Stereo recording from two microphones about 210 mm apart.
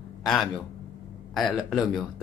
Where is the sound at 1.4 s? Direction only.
Centre (ahead or behind).